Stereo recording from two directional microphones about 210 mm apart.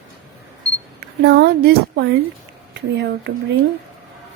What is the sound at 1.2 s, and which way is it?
Speech, 50° right (ahead or behind).